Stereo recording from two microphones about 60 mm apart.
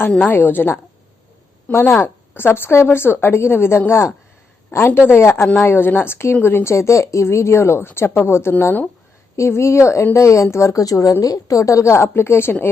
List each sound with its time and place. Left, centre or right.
0.1 s a woman's voice: left
0.3 s a woman's voice: left
1.7 s a woman's voice: left
6.7 s a woman's voice: left